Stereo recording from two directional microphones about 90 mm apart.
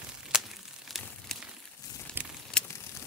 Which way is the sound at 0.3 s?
5° right (ahead or behind).